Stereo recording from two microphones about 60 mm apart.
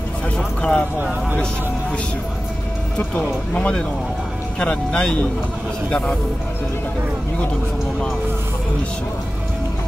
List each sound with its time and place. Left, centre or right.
0.6 s speech: centre
3.5 s speech: centre